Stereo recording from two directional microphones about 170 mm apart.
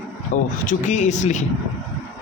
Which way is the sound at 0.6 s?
45° left (ahead or behind).